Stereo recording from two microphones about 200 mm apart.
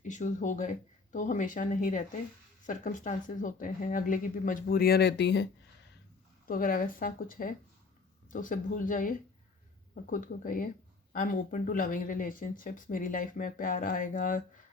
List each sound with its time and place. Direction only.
0.1 s speech: 40° left (ahead or behind); by 5.5 s 60° left (ahead or behind)
6.5 s speech: 45° left (ahead or behind)